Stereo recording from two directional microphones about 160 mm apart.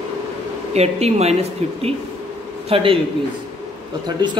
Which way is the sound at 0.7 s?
40° right (ahead or behind).